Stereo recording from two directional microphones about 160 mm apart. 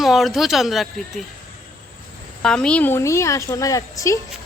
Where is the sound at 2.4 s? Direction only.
5° left (ahead or behind); by 4.2 s 20° left (ahead or behind).